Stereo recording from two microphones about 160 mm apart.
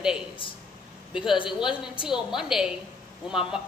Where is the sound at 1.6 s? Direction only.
5° right (ahead or behind).